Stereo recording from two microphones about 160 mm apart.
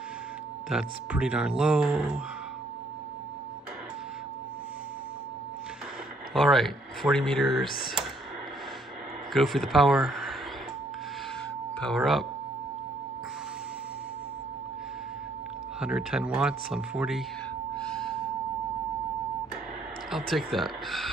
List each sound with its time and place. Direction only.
0.7 s speech: 5° right (ahead or behind)
6.3 s speech: centre (ahead or behind)
9.3 s speech: centre (ahead or behind)
11.8 s speech: centre (ahead or behind)
15.8 s speech: 5° right (ahead or behind)
17.7 s gasp: 5° left (ahead or behind)
20.1 s speech: centre (ahead or behind)